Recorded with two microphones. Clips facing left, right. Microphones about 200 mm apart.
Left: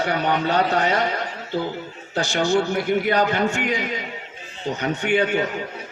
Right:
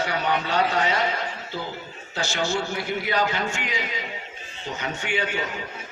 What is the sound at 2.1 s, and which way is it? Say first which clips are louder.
A man's voice: left 6 dB; 55° left (ahead or behind).